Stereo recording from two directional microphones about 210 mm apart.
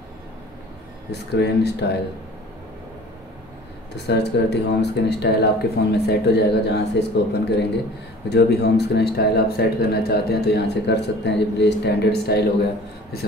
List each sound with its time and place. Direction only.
1.3 s a man's voice: 55° left (ahead or behind)
3.9 s a man's voice: 55° left (ahead or behind)